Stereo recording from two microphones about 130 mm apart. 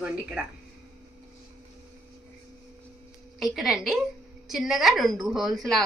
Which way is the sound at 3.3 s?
Centre (ahead or behind).